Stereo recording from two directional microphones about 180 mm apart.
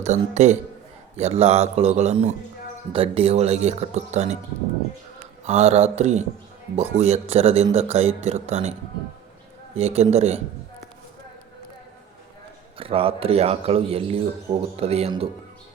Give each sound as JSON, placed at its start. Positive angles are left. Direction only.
{"t": 0.0, "sound": "speech", "side_deg": -40}
{"t": 5.5, "sound": "speech", "side_deg": -35}
{"t": 9.7, "sound": "speech", "side_deg": -35}
{"t": 12.7, "sound": "speech", "side_deg": -30}